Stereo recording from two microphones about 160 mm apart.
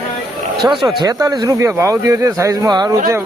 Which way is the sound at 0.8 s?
20° right (ahead or behind).